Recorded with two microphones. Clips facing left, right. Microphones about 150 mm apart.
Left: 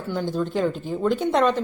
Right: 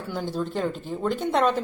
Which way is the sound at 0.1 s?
5° right (ahead or behind).